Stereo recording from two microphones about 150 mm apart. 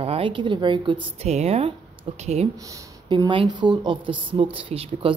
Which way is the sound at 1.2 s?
45° right (ahead or behind).